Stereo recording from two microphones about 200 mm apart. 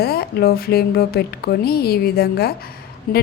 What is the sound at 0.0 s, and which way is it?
A woman's voice, 50° left (ahead or behind).